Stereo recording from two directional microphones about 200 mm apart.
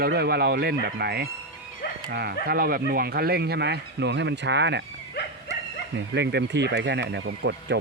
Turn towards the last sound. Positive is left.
turn(degrees=-60)  # may be behind; listen again after turning